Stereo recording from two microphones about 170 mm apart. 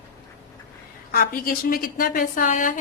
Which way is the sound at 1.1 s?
60° left (ahead or behind).